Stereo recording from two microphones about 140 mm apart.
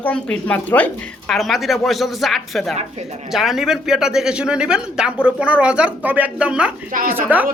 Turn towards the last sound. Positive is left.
turn(degrees=-10)  # may be behind; listen again after turning